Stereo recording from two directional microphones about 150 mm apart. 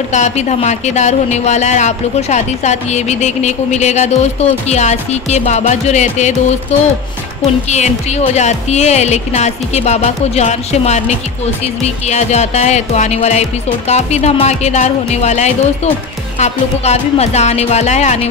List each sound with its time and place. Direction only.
0.1 s speech: 50° left (ahead or behind)